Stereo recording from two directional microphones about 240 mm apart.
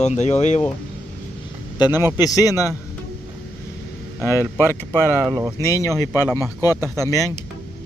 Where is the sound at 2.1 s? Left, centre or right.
Centre.